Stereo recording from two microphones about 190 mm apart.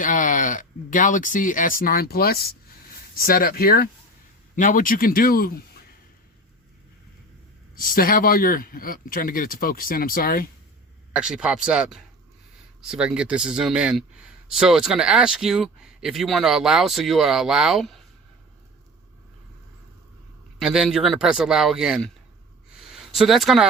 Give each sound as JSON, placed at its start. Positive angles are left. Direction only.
{"t": 0.0, "sound": "speech", "side_deg": 45}
{"t": 7.8, "sound": "speech", "side_deg": 50}
{"t": 11.1, "sound": "speech", "side_deg": -5}
{"t": 20.6, "sound": "speech", "side_deg": -5}
{"t": 22.8, "sound": "a sound", "side_deg": 0}